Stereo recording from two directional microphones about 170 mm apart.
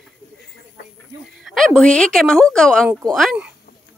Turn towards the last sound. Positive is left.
turn(degrees=0)  # may be behind; listen again after turning